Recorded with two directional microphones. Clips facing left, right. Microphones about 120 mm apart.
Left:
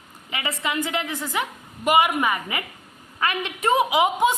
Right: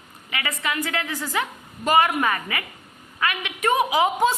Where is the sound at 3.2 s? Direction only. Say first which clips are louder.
Even; 30° left (ahead or behind).